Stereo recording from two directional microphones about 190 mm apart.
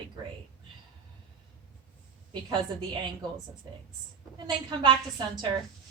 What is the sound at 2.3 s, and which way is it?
Speech, 25° right (ahead or behind).